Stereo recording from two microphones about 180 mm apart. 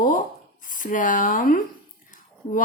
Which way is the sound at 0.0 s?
50° left (ahead or behind).